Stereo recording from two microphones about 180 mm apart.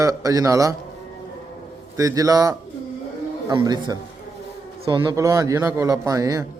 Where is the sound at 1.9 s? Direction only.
20° right (ahead or behind).